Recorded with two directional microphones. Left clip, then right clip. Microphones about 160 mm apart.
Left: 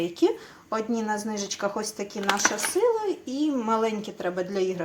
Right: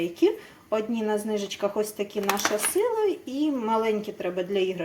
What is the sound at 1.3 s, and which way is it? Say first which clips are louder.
Speech: right 3 dB; 25° right (ahead or behind).